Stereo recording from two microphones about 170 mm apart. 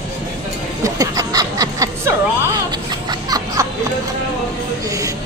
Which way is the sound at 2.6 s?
25° right (ahead or behind).